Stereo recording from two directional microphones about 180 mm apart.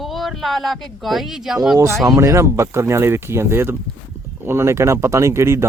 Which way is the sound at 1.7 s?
15° right (ahead or behind).